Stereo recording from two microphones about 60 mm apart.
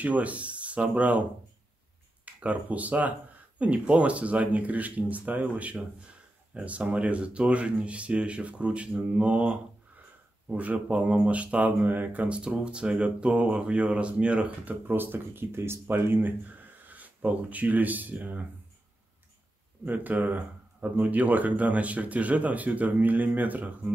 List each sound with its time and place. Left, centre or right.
0.0 s speech: right
2.2 s speech: right
12.4 s speech: centre
19.8 s speech: right